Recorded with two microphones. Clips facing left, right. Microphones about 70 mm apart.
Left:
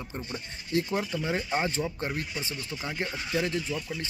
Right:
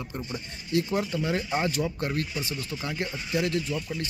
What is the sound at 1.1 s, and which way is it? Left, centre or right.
Speech, left.